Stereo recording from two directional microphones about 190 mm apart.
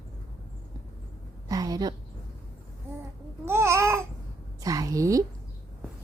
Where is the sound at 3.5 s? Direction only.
15° right (ahead or behind).